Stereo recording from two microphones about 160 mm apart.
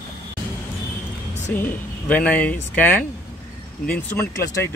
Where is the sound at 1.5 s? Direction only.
10° left (ahead or behind).